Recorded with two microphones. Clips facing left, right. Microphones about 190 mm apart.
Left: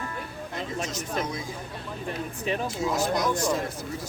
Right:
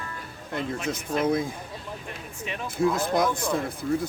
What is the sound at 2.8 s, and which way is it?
Speech, 55° right (ahead or behind).